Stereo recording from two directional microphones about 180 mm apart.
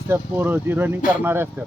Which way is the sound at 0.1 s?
10° right (ahead or behind).